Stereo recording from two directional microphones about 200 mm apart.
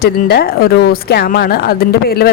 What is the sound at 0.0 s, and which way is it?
Speech, 50° left (ahead or behind).